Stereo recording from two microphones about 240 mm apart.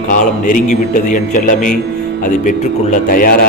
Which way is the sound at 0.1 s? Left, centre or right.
Left.